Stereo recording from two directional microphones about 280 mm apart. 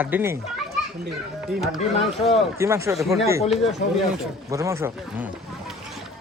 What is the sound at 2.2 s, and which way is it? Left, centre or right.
Speech, centre.